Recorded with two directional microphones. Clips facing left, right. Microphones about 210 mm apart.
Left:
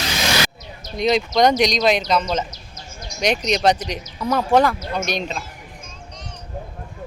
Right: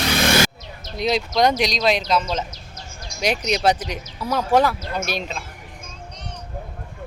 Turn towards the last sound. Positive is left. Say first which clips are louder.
# left 2 dB
turn(degrees=-5)  # may be behind; listen again after turning